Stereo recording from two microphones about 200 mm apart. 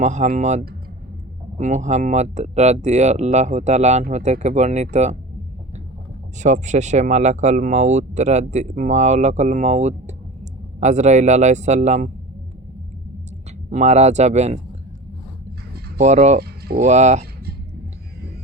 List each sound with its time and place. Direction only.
0.0 s speech: 35° right (ahead or behind)
6.4 s speech: 35° right (ahead or behind)
13.7 s speech: 35° right (ahead or behind)
16.0 s speech: 35° right (ahead or behind)